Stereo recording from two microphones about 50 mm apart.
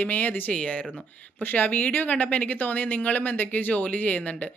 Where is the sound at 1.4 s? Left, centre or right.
Left.